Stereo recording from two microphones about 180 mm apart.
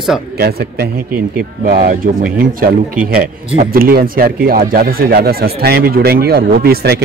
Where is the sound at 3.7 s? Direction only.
55° right (ahead or behind).